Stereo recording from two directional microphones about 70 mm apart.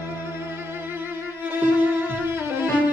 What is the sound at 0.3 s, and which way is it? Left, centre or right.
Music, right.